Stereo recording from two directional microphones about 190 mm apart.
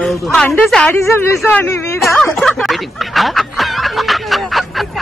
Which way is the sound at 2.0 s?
Centre (ahead or behind).